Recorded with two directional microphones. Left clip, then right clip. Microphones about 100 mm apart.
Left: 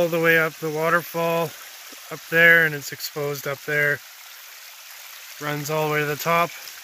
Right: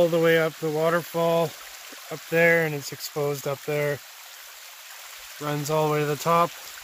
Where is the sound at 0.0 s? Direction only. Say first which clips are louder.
Left 1 dB; 5° right (ahead or behind).